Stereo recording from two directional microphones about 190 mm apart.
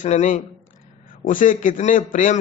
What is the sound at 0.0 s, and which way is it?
A man's voice, 40° left (ahead or behind).